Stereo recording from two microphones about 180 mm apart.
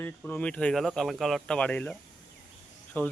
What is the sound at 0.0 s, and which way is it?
A man's voice, 10° left (ahead or behind).